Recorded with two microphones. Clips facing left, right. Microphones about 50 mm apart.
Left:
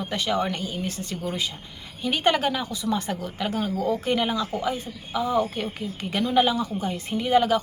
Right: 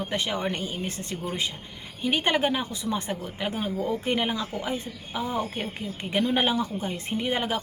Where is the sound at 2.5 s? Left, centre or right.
Right.